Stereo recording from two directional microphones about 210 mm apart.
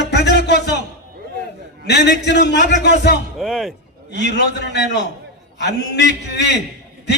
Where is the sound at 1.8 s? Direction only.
55° left (ahead or behind).